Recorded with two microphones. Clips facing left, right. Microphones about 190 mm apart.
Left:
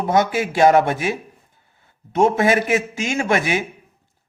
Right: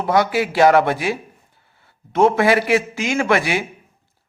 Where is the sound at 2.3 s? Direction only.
20° left (ahead or behind).